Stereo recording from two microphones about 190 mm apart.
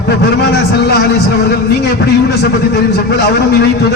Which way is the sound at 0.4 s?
60° left (ahead or behind).